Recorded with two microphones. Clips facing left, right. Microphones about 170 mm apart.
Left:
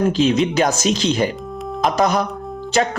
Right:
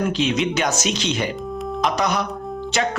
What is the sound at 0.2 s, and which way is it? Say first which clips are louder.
Speech: left 5 dB; 35° left (ahead or behind).